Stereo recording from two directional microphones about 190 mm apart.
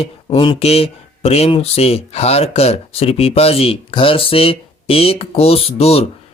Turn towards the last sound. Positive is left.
turn(degrees=30)  # may be behind; listen again after turning